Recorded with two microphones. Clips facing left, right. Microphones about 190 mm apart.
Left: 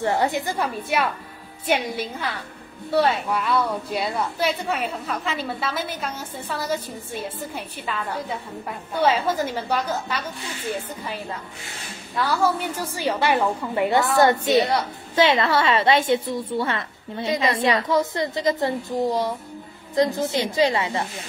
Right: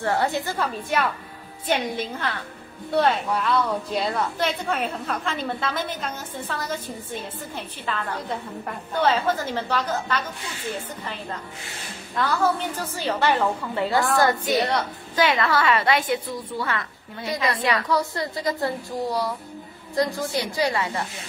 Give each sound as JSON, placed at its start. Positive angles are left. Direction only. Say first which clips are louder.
{"t": 0.0, "sound": "a woman's voice", "louder": "left 1 dB", "side_deg": 15}
{"t": 12.2, "sound": "a woman's voice", "louder": "left 1 dB", "side_deg": 10}